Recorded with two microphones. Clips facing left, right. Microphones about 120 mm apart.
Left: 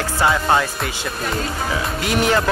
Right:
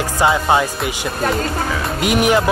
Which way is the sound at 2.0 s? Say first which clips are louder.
Right 4 dB; 20° right (ahead or behind).